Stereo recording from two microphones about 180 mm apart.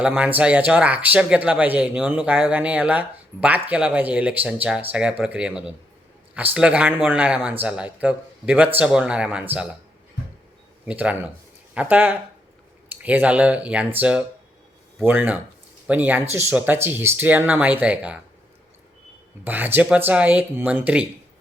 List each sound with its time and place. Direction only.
0.0 s speech: 5° right (ahead or behind)
10.8 s speech: 10° right (ahead or behind)
19.5 s speech: 10° right (ahead or behind)